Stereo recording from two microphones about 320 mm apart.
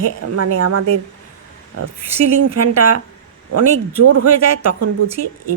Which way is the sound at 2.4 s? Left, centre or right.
Right.